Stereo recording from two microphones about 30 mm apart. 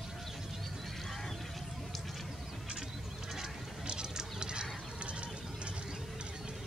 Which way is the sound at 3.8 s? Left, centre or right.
Right.